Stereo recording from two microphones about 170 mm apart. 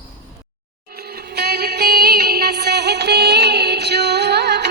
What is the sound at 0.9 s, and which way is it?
Music, 65° right (ahead or behind).